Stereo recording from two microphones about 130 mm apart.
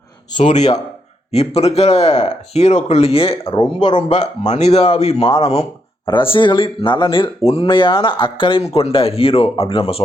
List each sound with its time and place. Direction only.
0.4 s speech: 60° left (ahead or behind)
6.1 s speech: 40° left (ahead or behind)